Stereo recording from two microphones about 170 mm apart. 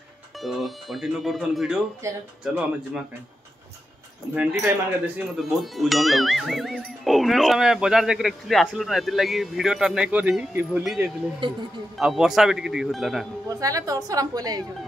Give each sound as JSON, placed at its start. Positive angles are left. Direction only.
{"t": 0.4, "sound": "speech", "side_deg": 0}
{"t": 2.0, "sound": "speech", "side_deg": -15}
{"t": 2.4, "sound": "speech", "side_deg": -5}
{"t": 4.4, "sound": "speech", "side_deg": -10}
{"t": 13.5, "sound": "a woman's voice", "side_deg": -20}